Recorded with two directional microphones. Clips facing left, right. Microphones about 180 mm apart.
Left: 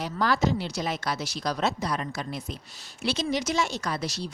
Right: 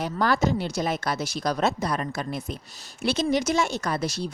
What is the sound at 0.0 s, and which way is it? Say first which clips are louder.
Speech: right 2 dB; 50° right (ahead or behind).